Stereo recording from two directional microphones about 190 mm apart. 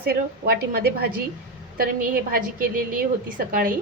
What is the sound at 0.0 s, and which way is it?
A woman's voice, 55° right (ahead or behind).